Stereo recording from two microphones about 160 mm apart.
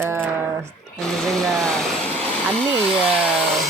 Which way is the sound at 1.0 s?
5° left (ahead or behind).